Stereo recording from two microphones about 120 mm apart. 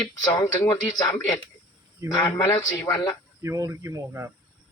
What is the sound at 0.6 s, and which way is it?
Speech, 25° left (ahead or behind).